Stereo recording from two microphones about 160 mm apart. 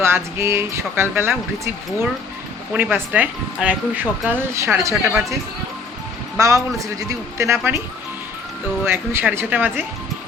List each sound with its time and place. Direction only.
0.0 s speech: 15° right (ahead or behind)
6.4 s speech: 20° right (ahead or behind)
8.9 s speech: 15° right (ahead or behind)